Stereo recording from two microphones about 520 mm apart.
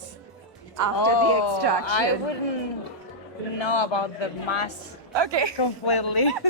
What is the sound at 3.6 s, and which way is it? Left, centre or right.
Speech, left.